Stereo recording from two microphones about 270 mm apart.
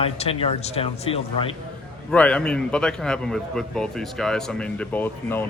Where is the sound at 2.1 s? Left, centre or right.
Centre.